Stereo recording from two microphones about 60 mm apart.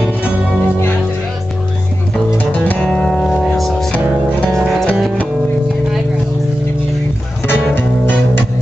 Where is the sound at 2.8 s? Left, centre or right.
Centre.